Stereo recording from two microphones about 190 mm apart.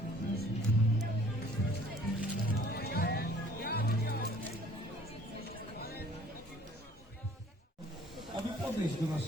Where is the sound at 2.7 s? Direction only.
55° left (ahead or behind).